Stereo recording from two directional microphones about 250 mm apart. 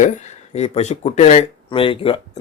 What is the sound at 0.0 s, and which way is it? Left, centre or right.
Speech, left.